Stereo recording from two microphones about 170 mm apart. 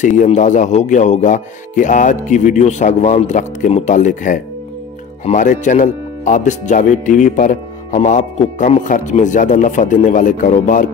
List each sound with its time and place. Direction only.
0.0 s speech: 45° left (ahead or behind)